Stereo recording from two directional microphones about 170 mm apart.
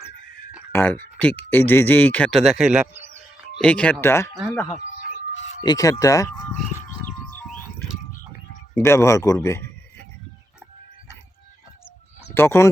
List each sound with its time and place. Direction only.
0.7 s speech: 10° left (ahead or behind); by 3.0 s 5° right (ahead or behind)
3.6 s speech: 5° left (ahead or behind)
4.7 s a sound: 40° left (ahead or behind)
5.6 s speech: 20° left (ahead or behind)
8.7 s speech: 15° left (ahead or behind)
12.3 s speech: 15° left (ahead or behind)